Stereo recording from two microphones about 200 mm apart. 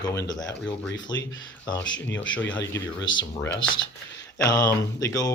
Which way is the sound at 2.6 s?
15° left (ahead or behind).